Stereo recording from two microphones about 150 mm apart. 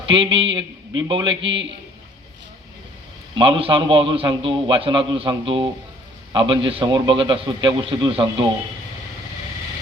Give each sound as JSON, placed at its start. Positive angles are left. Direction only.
{"t": 0.1, "sound": "a man's voice", "side_deg": -35}
{"t": 3.3, "sound": "a man's voice", "side_deg": -35}